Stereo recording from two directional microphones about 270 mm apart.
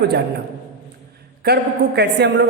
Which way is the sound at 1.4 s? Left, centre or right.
Right.